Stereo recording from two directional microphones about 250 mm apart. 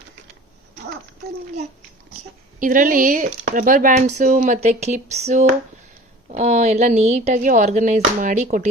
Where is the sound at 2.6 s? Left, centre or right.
Right.